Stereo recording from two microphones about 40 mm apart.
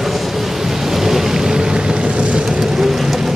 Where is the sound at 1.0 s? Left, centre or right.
Centre.